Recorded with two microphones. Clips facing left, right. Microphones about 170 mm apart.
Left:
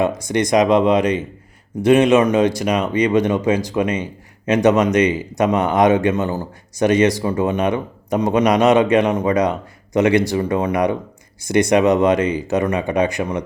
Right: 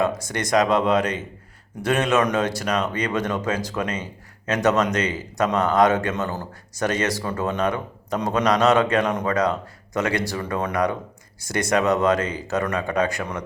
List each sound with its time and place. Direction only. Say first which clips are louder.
0.0 s speech: left 5 dB; 15° left (ahead or behind)